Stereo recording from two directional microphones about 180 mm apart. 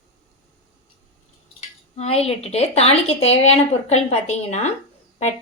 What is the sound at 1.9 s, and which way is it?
A woman's voice, 35° left (ahead or behind).